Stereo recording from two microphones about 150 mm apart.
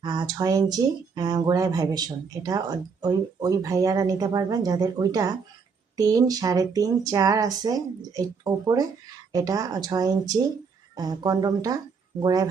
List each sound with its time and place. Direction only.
0.0 s speech: 30° right (ahead or behind)